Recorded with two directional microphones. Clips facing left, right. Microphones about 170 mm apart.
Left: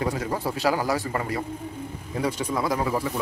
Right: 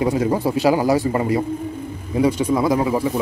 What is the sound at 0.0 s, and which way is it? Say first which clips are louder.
A man's voice: right 8 dB; 20° right (ahead or behind).